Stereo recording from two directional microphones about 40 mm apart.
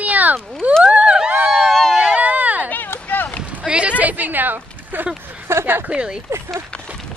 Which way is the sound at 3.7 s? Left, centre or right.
Right.